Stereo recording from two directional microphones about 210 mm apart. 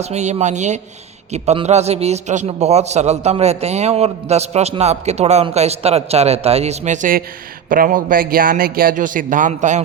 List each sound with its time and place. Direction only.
0.0 s a man's voice: 30° right (ahead or behind)